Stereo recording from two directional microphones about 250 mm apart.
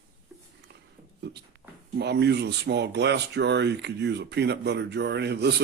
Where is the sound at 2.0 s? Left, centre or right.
Right.